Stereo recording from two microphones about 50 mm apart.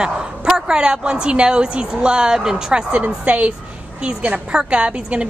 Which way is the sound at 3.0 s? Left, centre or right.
Right.